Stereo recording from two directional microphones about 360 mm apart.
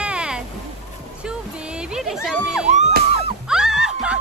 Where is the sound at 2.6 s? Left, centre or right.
Centre.